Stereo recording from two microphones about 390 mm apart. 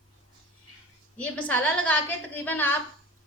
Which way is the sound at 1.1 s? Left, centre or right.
Centre.